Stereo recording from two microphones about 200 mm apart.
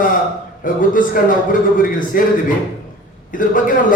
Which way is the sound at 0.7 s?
40° left (ahead or behind).